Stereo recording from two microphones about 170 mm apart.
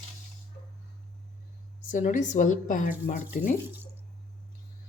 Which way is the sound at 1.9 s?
50° left (ahead or behind).